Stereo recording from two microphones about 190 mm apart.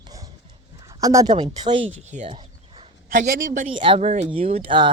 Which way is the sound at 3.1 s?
45° right (ahead or behind).